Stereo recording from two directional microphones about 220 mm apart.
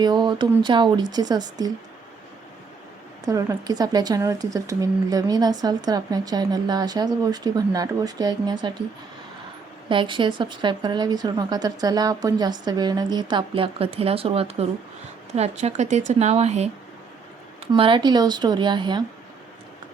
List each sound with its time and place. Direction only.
0.0 s a woman's voice: 20° right (ahead or behind)
3.2 s a woman's voice: 15° right (ahead or behind)
9.9 s a woman's voice: 20° right (ahead or behind)
17.7 s a woman's voice: 20° right (ahead or behind)